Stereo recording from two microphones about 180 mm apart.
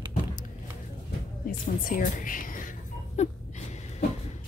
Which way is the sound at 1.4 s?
50° left (ahead or behind).